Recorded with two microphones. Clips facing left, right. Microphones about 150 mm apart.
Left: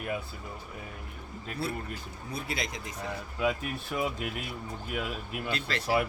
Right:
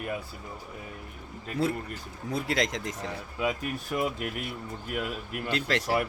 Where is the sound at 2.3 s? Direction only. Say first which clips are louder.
Right 7 dB; 90° right.